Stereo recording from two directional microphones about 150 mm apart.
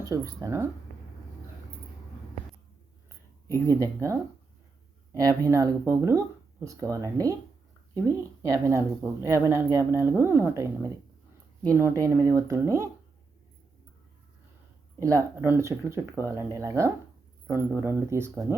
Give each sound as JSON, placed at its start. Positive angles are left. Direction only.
{"t": 0.1, "sound": "speech", "side_deg": -20}
{"t": 3.5, "sound": "speech", "side_deg": -20}
{"t": 14.9, "sound": "speech", "side_deg": -20}